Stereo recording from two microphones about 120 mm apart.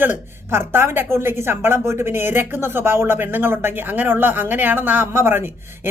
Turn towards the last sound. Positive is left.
turn(degrees=-20)  # may be behind; listen again after turning